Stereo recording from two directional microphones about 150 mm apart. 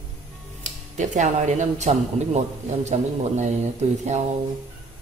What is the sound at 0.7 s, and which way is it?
Speech, 55° right (ahead or behind).